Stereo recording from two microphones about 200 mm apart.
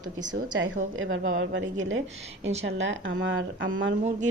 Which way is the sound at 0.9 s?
80° right.